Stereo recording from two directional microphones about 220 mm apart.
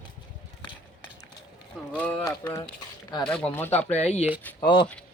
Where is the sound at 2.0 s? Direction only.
5° left (ahead or behind).